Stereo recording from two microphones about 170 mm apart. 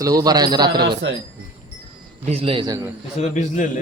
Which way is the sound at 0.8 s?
80° right.